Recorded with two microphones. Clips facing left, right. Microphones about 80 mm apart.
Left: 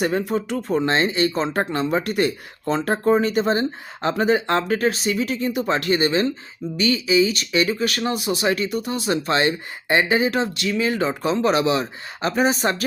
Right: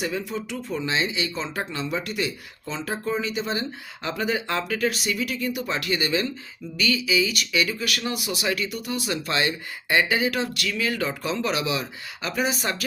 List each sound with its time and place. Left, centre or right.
0.0 s speech: left